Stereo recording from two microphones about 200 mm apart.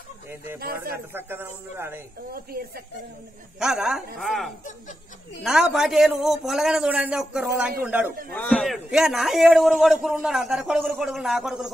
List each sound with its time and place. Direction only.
0.6 s speech: 50° right (ahead or behind)
1.1 s speech: 10° right (ahead or behind)
2.3 s speech: 50° right (ahead or behind)
3.5 s a man's voice: 5° right (ahead or behind)
8.4 s a man's voice: 5° left (ahead or behind)